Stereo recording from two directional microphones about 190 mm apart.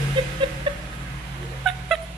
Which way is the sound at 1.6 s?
Centre (ahead or behind).